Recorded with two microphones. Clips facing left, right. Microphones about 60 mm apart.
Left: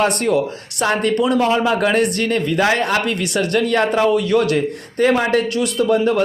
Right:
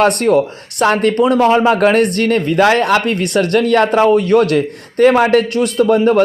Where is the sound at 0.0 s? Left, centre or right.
Right.